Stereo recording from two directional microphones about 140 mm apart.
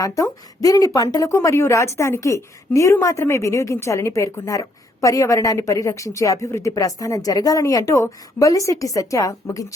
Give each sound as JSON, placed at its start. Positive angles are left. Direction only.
{"t": 0.0, "sound": "a woman's voice", "side_deg": 25}